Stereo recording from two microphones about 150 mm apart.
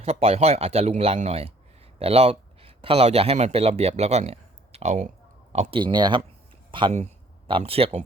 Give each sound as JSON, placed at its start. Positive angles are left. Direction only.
{"t": 0.0, "sound": "speech", "side_deg": -40}
{"t": 5.8, "sound": "speech", "side_deg": -30}